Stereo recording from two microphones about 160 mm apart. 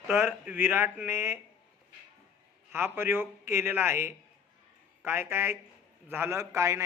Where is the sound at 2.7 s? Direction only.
15° right (ahead or behind).